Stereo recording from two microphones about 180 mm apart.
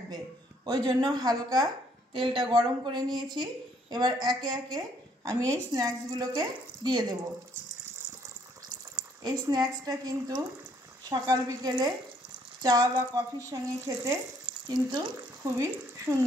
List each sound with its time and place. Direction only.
0.7 s speech: 25° right (ahead or behind)
9.2 s speech: 20° right (ahead or behind)